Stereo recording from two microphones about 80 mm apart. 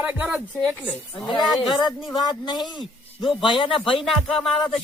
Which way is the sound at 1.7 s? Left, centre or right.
Left.